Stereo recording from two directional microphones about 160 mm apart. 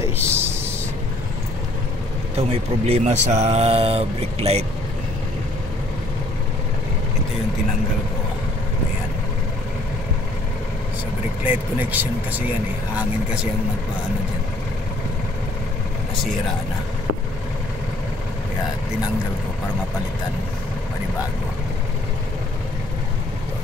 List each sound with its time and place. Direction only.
0.2 s a sound: 15° right (ahead or behind)
2.3 s speech: 40° right (ahead or behind)
11.4 s speech: 10° right (ahead or behind)